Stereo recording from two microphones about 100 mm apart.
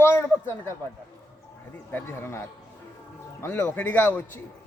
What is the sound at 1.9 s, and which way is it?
Speech, 25° left (ahead or behind).